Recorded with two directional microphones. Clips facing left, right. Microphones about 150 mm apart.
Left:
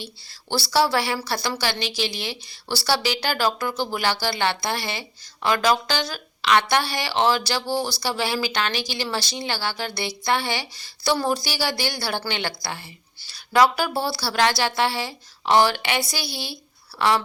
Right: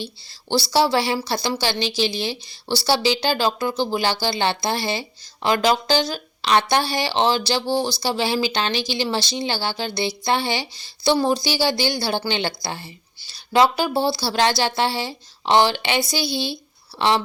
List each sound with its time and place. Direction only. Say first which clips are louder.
0.7 s speech: right 1 dB; 25° right (ahead or behind)